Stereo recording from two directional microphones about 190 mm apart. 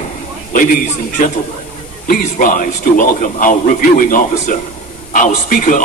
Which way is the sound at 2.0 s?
45° left (ahead or behind).